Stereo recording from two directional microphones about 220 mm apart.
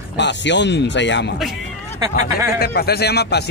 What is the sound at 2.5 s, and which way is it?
Speech, 45° left (ahead or behind).